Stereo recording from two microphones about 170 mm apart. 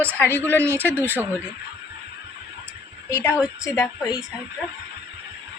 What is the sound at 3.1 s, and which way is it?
A woman's voice, 15° left (ahead or behind).